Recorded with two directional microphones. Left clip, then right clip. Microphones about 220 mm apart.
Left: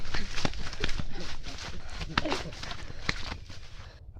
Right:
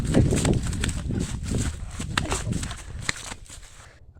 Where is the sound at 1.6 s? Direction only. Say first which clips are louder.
Right 5 dB; 55° right (ahead or behind).